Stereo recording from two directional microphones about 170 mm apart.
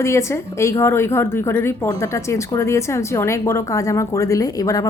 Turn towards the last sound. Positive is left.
turn(degrees=20)  # may be behind; listen again after turning